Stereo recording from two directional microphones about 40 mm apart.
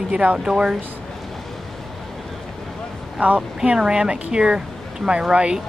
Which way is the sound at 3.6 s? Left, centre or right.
Right.